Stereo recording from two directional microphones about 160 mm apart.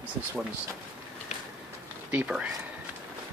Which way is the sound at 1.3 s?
50° left (ahead or behind).